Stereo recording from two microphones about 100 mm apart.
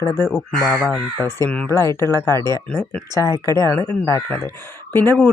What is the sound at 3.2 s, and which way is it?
Speech, 40° right (ahead or behind).